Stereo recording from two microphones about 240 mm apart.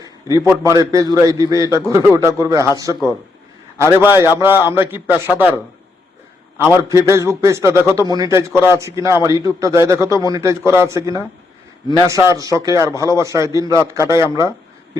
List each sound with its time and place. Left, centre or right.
0.0 s a sound: centre
0.6 s a man's voice: centre
4.0 s a man's voice: centre
6.7 s a man's voice: centre
10.0 s a man's voice: centre
10.3 s a man's voice: centre